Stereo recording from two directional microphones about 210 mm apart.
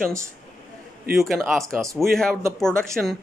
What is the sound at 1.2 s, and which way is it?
A man's voice, centre (ahead or behind).